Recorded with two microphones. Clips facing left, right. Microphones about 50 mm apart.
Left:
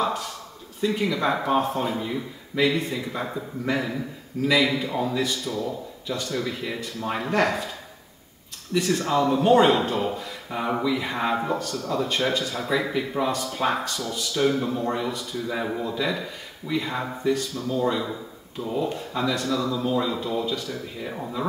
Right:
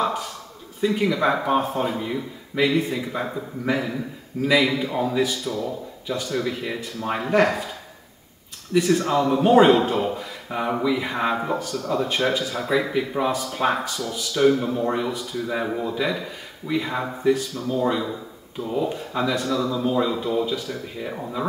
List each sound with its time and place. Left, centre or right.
0.0 s a sound: centre
0.7 s speech: centre
8.7 s speech: centre
18.6 s speech: centre